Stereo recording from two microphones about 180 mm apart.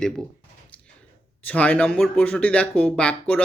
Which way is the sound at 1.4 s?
10° left (ahead or behind).